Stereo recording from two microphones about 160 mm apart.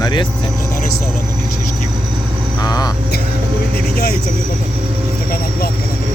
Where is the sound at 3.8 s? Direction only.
75° left (ahead or behind).